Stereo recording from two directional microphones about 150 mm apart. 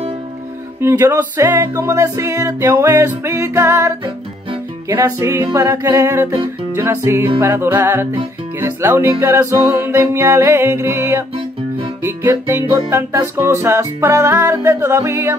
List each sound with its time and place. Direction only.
0.7 s music: 15° right (ahead or behind)